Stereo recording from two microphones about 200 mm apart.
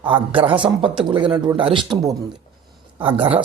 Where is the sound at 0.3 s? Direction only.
25° right (ahead or behind).